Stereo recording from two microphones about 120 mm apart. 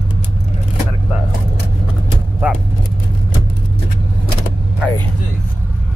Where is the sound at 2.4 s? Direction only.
15° right (ahead or behind).